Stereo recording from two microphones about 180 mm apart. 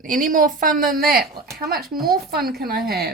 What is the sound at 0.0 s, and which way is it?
A woman's voice, 50° right (ahead or behind).